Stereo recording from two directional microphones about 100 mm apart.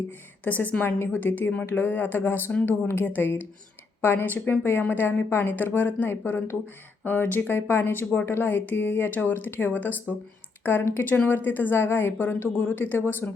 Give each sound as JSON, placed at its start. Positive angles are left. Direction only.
{"t": 0.4, "sound": "speech", "side_deg": 15}